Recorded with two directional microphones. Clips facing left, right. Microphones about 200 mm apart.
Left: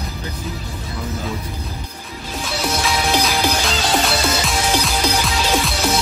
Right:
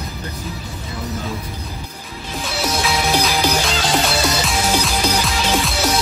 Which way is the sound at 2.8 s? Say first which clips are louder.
Even; centre (ahead or behind).